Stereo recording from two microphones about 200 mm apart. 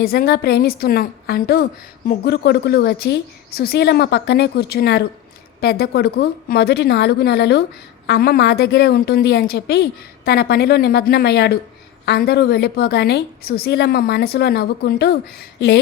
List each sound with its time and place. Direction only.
0.0 s a woman's voice: 50° left (ahead or behind)